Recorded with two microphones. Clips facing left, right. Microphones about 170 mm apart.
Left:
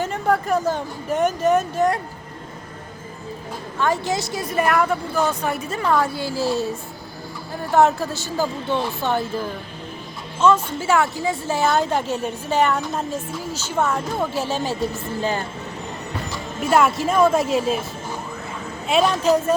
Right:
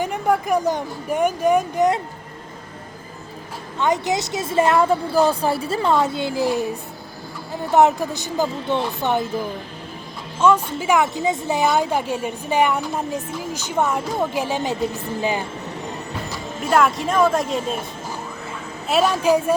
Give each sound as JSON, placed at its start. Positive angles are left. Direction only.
{"t": 0.0, "sound": "a woman's voice", "side_deg": -15}
{"t": 3.8, "sound": "a woman's voice", "side_deg": -20}
{"t": 10.4, "sound": "a woman's voice", "side_deg": -15}
{"t": 16.6, "sound": "a woman's voice", "side_deg": 0}
{"t": 18.9, "sound": "a woman's voice", "side_deg": -5}